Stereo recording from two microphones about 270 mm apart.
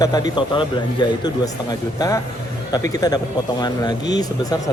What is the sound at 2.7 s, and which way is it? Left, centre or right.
A man's voice, centre.